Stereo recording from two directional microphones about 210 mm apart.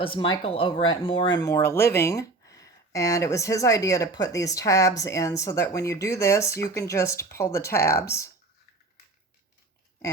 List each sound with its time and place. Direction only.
0.0 s speech: 25° left (ahead or behind)